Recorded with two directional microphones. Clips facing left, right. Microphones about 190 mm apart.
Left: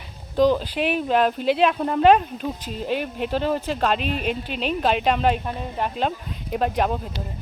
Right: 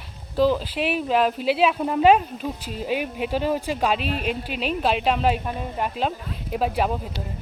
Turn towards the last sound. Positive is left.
turn(degrees=-5)  # may be behind; listen again after turning